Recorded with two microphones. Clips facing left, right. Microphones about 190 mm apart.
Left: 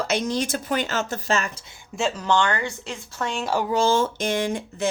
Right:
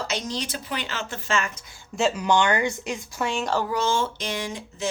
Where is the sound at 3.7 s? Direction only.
35° left (ahead or behind); by 4.8 s 55° left (ahead or behind).